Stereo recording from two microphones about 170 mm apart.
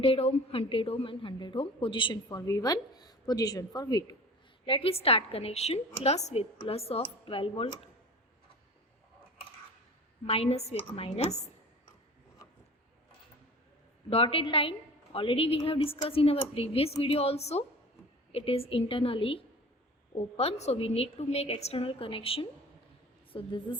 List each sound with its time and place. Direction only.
0.0 s a woman's voice: 35° left (ahead or behind)
10.2 s a woman's voice: 35° left (ahead or behind)
14.1 s a woman's voice: 35° left (ahead or behind)